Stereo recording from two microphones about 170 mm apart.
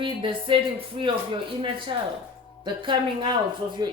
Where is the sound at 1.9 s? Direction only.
30° right (ahead or behind).